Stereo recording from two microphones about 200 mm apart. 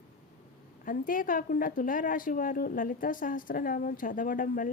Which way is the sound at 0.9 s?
45° left (ahead or behind).